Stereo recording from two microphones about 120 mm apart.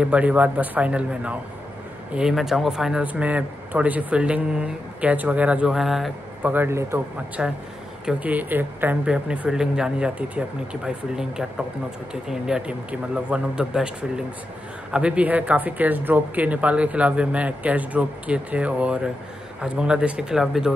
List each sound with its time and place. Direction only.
0.0 s speech: 10° right (ahead or behind)
6.5 s speech: 20° right (ahead or behind)
7.4 s speech: 5° right (ahead or behind)